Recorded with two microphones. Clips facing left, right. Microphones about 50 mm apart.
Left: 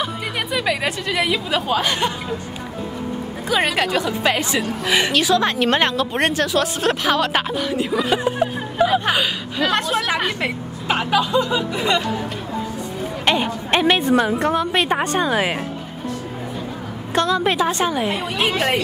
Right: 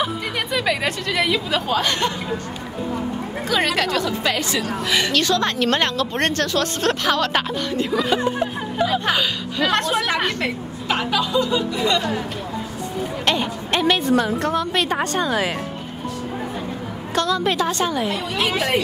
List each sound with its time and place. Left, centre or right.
0.0 s speech: centre
3.4 s a woman's voice: centre
9.7 s a woman's voice: centre
13.2 s a woman's voice: centre
17.1 s a woman's voice: left